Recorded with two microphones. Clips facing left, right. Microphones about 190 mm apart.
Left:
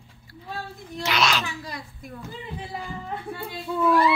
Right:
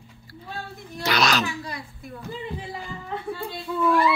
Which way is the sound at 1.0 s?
40° right (ahead or behind).